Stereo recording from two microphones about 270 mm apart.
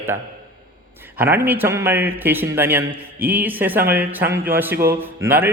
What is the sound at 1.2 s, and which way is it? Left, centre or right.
A man's voice, centre.